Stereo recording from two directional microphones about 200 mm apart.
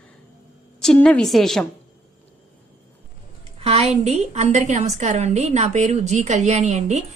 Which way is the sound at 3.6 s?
30° right (ahead or behind).